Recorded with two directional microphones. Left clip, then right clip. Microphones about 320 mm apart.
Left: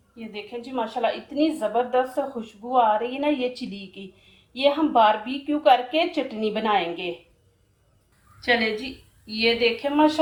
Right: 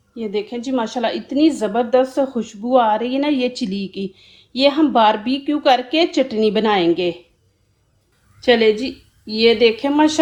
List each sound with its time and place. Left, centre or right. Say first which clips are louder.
0.2 s a woman's voice: right 11 dB; right
8.4 s a woman's voice: right 8 dB; centre